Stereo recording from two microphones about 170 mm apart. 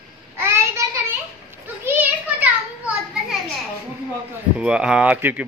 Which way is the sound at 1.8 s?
10° right (ahead or behind).